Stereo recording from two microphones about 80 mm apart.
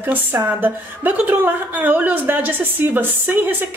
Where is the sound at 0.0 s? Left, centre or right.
Right.